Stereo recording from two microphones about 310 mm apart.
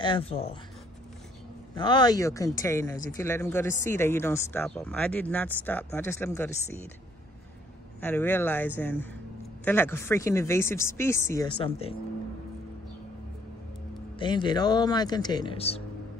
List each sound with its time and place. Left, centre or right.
0.0 s speech: centre
1.8 s speech: centre
8.0 s speech: centre
14.1 s speech: centre